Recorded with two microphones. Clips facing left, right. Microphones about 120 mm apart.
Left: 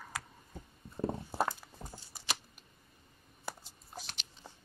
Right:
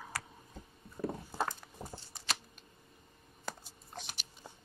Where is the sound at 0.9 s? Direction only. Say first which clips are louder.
Left 2 dB; 30° left (ahead or behind).